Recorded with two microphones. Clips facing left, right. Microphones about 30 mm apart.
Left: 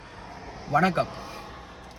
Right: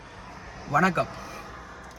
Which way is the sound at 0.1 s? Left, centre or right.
Centre.